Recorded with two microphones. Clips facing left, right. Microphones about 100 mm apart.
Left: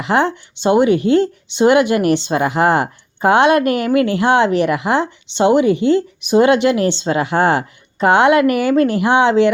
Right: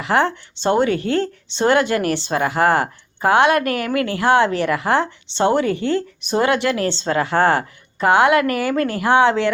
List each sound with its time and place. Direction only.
0.0 s speech: 20° left (ahead or behind)